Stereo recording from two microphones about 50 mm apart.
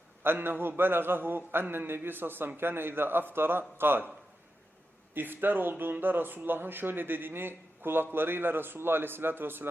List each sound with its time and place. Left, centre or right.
0.2 s speech: right
5.1 s speech: right